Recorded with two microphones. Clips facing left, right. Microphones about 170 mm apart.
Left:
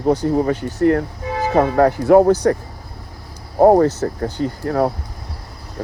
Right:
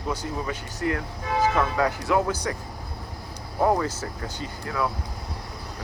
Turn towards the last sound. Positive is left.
turn(degrees=50)  # may be behind; listen again after turning